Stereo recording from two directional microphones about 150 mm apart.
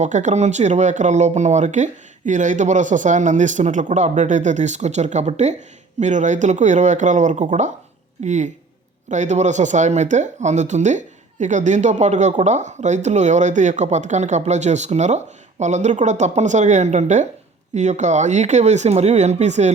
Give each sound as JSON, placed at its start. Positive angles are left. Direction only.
{"t": 0.0, "sound": "speech", "side_deg": -55}